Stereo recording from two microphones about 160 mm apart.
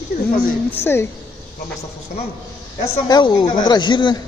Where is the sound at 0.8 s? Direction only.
15° left (ahead or behind).